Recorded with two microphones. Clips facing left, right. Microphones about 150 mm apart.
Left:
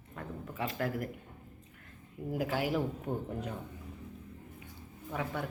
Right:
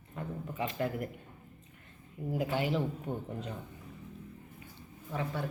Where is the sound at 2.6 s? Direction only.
10° left (ahead or behind).